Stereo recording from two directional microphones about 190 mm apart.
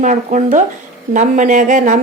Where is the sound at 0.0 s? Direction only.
40° right (ahead or behind).